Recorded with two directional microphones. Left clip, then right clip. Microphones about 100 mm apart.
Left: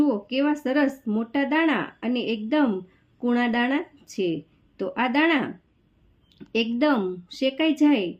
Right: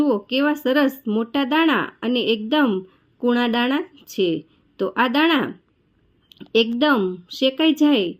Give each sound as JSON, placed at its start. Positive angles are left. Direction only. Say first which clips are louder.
{"t": 0.0, "sound": "speech", "louder": "right 4 dB", "side_deg": -30}
{"t": 6.5, "sound": "speech", "louder": "right 5 dB", "side_deg": -30}